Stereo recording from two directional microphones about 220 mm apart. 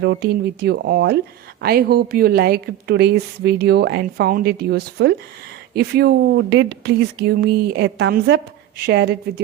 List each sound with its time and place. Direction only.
0.0 s a woman's voice: 50° right (ahead or behind)